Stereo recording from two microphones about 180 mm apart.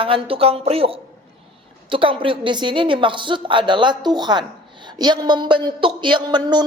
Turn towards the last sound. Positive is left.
turn(degrees=-25)  # may be behind; listen again after turning